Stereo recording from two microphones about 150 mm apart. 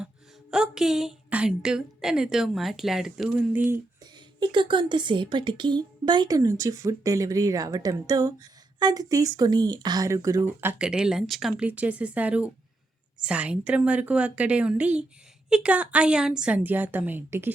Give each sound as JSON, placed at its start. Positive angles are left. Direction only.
{"t": 0.5, "sound": "a woman's voice", "side_deg": -5}
{"t": 4.0, "sound": "a woman's voice", "side_deg": -30}